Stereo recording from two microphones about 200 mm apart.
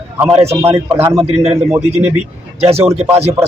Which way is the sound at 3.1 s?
30° right (ahead or behind).